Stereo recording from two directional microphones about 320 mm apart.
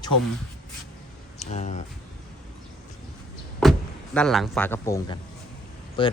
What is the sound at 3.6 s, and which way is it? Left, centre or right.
Speech, centre.